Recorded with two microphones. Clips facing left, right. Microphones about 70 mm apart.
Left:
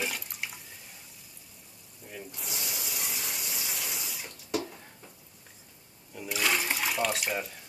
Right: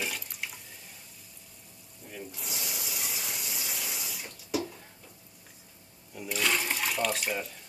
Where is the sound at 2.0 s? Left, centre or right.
Centre.